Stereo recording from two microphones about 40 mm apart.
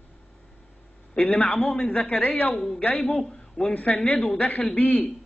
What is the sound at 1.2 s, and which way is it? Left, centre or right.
A man's voice, left.